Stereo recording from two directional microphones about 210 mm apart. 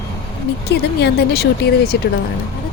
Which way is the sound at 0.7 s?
50° left (ahead or behind).